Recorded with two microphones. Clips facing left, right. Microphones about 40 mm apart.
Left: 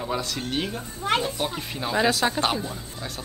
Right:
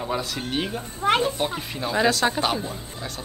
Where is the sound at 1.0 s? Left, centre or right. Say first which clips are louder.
Right 4 dB; right.